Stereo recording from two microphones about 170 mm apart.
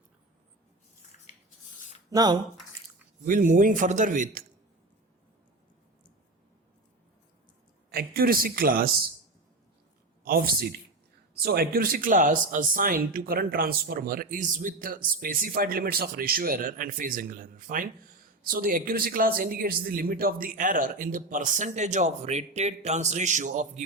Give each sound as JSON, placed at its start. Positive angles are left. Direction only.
{"t": 1.3, "sound": "a sound", "side_deg": 45}
{"t": 2.0, "sound": "speech", "side_deg": -25}
{"t": 3.2, "sound": "a man's voice", "side_deg": -50}
{"t": 7.9, "sound": "a man's voice", "side_deg": -60}
{"t": 10.2, "sound": "a man's voice", "side_deg": -60}